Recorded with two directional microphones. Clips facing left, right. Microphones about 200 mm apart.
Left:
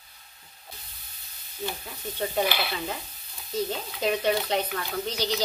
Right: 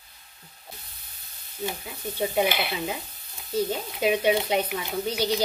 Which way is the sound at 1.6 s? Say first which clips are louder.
Right 2 dB; 10° right (ahead or behind).